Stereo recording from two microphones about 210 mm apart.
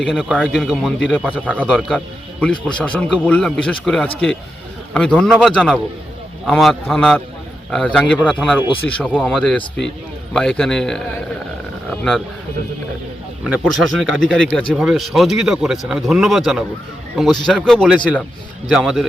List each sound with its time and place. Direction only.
0.0 s a man's voice: 5° left (ahead or behind)
8.6 s speech: 25° left (ahead or behind)
9.0 s a man's voice: 5° left (ahead or behind)
13.4 s a man's voice: centre (ahead or behind)